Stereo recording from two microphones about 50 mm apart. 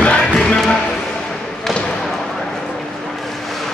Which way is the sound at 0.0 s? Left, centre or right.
Left.